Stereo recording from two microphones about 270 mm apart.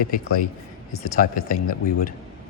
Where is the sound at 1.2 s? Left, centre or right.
Left.